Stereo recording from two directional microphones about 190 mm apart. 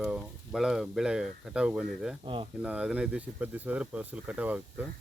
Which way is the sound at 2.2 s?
25° right (ahead or behind).